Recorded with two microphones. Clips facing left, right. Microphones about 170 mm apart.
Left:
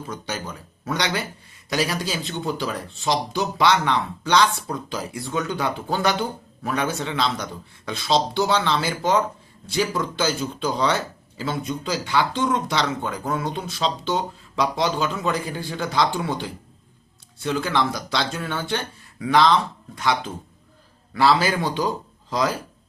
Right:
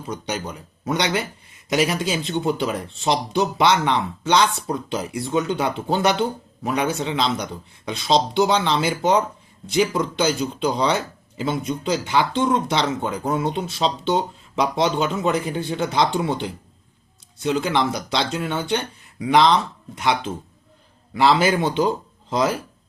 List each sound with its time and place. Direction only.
0.1 s speech: 20° right (ahead or behind)